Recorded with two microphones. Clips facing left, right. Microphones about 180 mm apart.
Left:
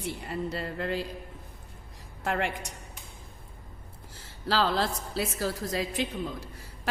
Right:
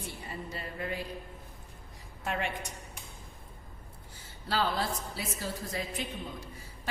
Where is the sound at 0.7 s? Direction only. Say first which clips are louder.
Left 4 dB; 90° left.